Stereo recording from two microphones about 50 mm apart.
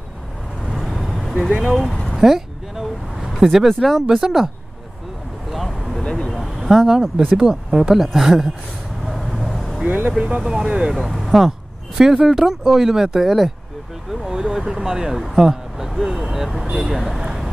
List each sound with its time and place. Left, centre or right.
0.6 s vehicle: centre
0.8 s vehicle: centre
1.8 s a sound: centre
2.1 s a sound: centre
4.0 s speech: centre
5.5 s vehicle: centre
6.0 s vehicle: centre
6.3 s a sound: centre
7.3 s speech: centre
9.0 s vehicle: centre
9.8 s speech: right
10.1 s speech: centre
10.9 s speech: centre